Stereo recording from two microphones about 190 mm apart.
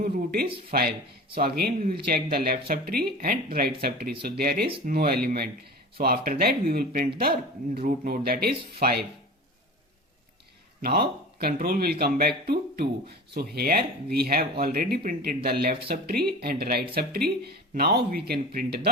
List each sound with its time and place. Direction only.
1.4 s speech: 55° right (ahead or behind)
11.3 s speech: 55° right (ahead or behind)